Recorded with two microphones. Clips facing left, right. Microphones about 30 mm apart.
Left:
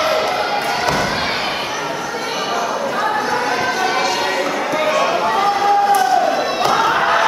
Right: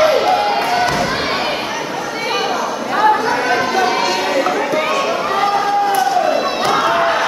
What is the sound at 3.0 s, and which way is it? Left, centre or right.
Chatter, centre.